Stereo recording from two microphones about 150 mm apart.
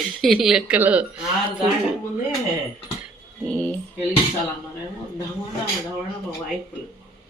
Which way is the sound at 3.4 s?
5° left (ahead or behind).